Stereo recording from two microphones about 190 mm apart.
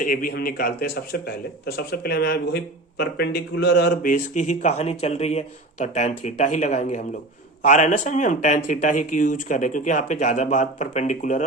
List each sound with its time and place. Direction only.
0.0 s a man's voice: 45° left (ahead or behind); by 4.1 s 60° left (ahead or behind)
4.1 s speech: 40° left (ahead or behind)